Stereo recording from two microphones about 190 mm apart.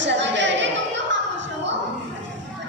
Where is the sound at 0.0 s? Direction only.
70° right (ahead or behind).